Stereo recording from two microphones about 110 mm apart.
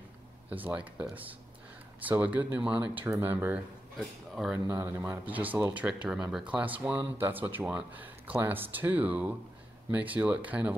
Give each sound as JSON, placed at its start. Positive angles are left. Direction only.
{"t": 0.5, "sound": "speech", "side_deg": -15}
{"t": 3.9, "sound": "speech", "side_deg": -5}
{"t": 4.6, "sound": "speech", "side_deg": -25}
{"t": 5.2, "sound": "speech", "side_deg": -15}